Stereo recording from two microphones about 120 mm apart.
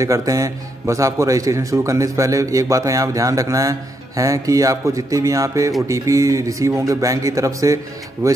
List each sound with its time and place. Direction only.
0.0 s a man's voice: 25° right (ahead or behind)